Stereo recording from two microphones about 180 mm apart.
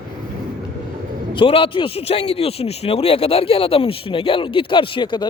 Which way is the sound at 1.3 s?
30° left (ahead or behind).